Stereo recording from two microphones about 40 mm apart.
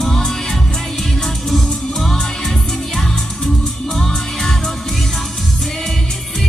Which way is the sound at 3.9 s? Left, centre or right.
Centre.